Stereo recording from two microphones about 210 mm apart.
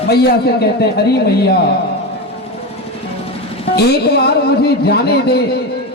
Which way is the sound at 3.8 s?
50° left (ahead or behind).